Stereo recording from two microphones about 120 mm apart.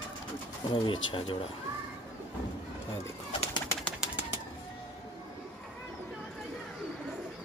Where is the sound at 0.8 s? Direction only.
45° left (ahead or behind).